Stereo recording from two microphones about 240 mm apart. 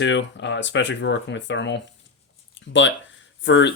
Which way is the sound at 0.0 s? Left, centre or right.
Left.